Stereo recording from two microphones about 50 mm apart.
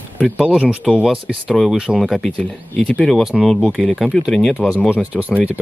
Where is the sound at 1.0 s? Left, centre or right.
Centre.